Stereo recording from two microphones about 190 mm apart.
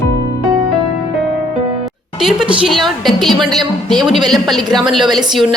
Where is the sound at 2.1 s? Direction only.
Centre (ahead or behind).